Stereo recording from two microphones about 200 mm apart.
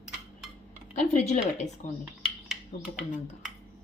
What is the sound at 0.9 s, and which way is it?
Speech, 35° left (ahead or behind).